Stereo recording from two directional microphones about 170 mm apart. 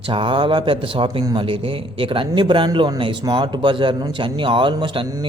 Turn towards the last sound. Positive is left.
turn(degrees=-25)  # may be behind; listen again after turning